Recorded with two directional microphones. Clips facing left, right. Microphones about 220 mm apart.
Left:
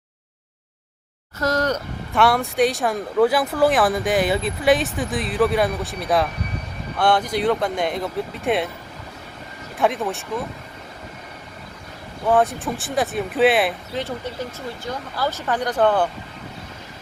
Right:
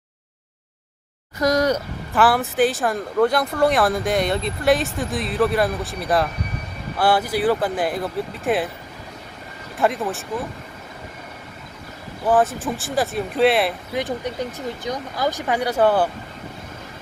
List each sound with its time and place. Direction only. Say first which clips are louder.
1.4 s speech: right 3 dB; 15° right (ahead or behind)
9.7 s speech: even; centre (ahead or behind)
12.2 s speech: even; centre (ahead or behind)
13.9 s speech: right 3 dB; 15° right (ahead or behind)